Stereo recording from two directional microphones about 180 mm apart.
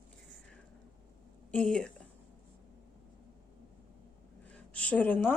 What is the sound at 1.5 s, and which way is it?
Speech, 5° left (ahead or behind).